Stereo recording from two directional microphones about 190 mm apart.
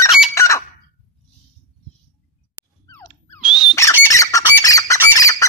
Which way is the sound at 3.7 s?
15° left (ahead or behind).